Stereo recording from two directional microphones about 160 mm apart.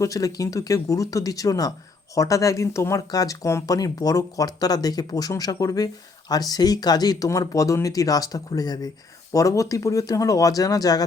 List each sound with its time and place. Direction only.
0.0 s speech: 20° left (ahead or behind)